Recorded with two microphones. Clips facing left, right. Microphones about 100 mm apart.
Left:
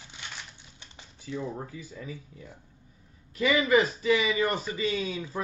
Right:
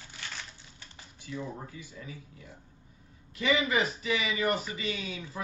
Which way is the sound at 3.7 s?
35° left (ahead or behind).